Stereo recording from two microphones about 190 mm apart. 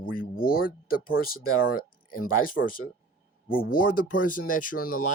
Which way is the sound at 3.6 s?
50° left (ahead or behind).